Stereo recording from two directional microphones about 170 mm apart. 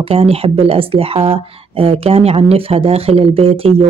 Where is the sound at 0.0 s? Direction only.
35° right (ahead or behind).